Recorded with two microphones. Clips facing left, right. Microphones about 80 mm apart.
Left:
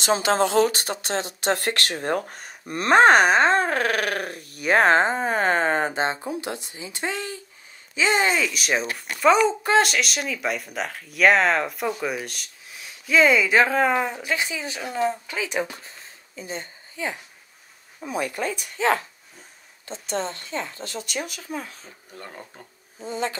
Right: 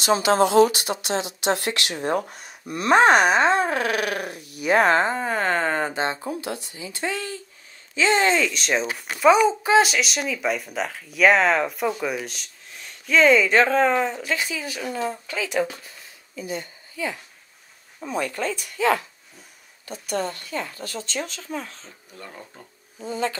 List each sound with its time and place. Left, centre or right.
0.0 s speech: left; by 8.8 s centre
8.9 s a woman's voice: centre; by 17.2 s left
18.0 s speech: centre
19.9 s speech: left